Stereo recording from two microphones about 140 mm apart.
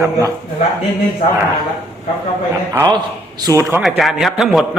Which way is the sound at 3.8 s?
Centre (ahead or behind).